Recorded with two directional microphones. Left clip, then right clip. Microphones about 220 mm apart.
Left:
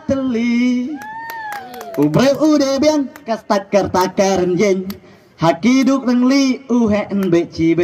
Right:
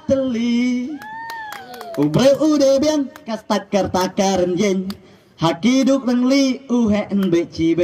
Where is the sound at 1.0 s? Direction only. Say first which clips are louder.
Left 3 dB; 45° left (ahead or behind).